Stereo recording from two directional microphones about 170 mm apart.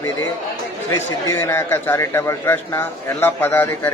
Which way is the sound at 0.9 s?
15° left (ahead or behind).